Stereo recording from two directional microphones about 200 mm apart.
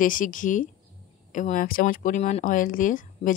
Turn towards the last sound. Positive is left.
turn(degrees=40)  # may be behind; listen again after turning